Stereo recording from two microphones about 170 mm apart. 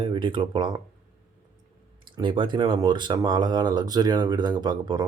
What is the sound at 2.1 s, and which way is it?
Speech, 30° right (ahead or behind).